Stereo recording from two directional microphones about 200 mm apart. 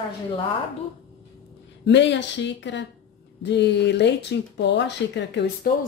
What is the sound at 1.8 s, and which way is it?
Speech, 60° left (ahead or behind).